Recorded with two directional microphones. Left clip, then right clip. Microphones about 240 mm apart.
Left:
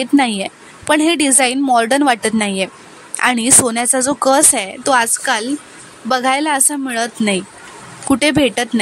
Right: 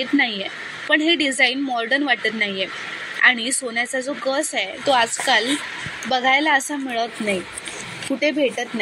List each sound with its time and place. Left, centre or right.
0.0 s speech: left